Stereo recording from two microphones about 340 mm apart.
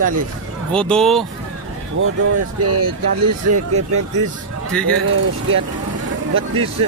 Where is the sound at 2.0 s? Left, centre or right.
Right.